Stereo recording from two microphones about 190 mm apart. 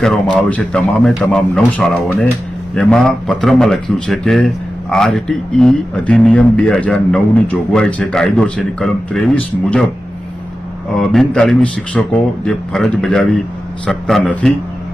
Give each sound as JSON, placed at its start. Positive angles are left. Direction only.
{"t": 0.0, "sound": "a man's voice", "side_deg": 5}
{"t": 10.9, "sound": "a man's voice", "side_deg": 0}